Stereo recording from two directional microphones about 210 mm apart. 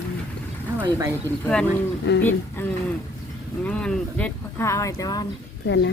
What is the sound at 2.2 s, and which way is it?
Speech, 10° left (ahead or behind).